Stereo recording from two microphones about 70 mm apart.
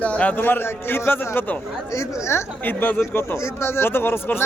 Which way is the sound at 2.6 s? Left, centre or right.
Left.